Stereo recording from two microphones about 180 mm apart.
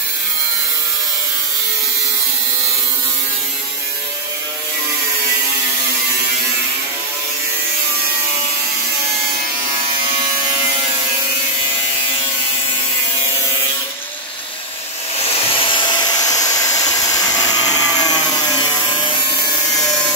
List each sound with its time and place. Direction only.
15.4 s hair dryer: 30° left (ahead or behind)